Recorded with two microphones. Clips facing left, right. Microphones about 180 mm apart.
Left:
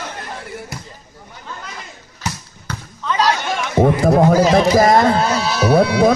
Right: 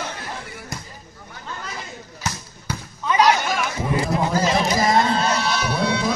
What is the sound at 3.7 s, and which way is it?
A man's voice, 65° left (ahead or behind).